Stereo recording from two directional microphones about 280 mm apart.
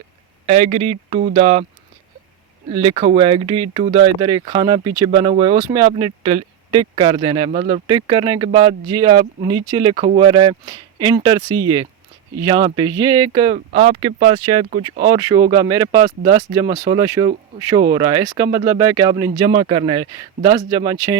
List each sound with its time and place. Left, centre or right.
0.4 s speech: right
2.6 s speech: centre